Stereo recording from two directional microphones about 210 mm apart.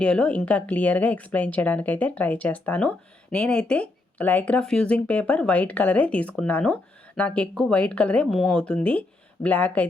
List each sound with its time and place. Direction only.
0.0 s a woman's voice: 5° left (ahead or behind)